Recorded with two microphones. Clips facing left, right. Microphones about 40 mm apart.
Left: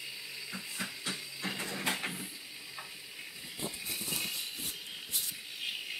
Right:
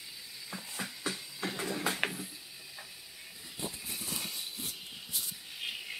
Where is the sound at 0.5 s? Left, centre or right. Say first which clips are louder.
Right 1 dB; centre.